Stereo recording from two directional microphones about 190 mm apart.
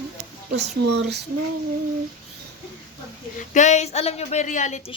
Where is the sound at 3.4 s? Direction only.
40° left (ahead or behind).